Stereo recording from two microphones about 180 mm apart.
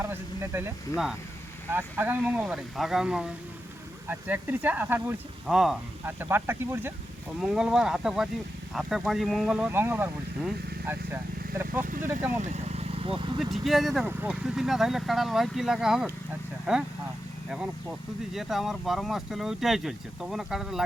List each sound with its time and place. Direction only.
0.0 s a sound: 15° right (ahead or behind)
1.7 s speech: 10° right (ahead or behind)
6.1 s speech: 10° right (ahead or behind)
12.4 s speech: 40° right (ahead or behind)
13.4 s speech: centre (ahead or behind)
18.3 s speech: centre (ahead or behind)